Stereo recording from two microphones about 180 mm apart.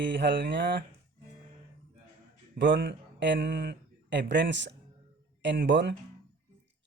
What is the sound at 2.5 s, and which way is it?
Speech, 80° right.